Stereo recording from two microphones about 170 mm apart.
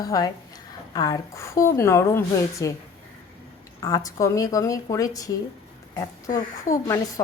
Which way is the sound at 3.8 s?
20° left (ahead or behind).